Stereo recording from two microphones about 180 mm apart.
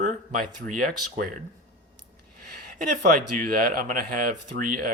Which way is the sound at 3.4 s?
55° right (ahead or behind).